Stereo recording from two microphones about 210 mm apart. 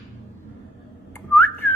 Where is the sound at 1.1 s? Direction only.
10° left (ahead or behind).